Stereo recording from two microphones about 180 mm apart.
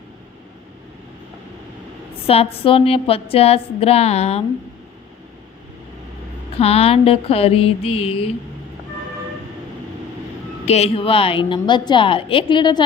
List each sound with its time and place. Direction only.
2.2 s a woman's voice: 35° left (ahead or behind)
6.6 s a woman's voice: 35° left (ahead or behind)
10.7 s a woman's voice: 35° left (ahead or behind)